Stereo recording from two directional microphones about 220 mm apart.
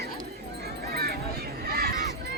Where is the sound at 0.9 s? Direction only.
45° right (ahead or behind).